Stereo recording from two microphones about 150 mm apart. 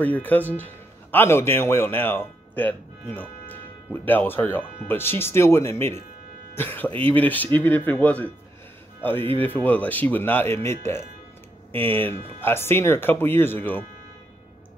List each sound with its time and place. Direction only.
0.0 s speech: 10° left (ahead or behind)
9.7 s speech: 10° left (ahead or behind)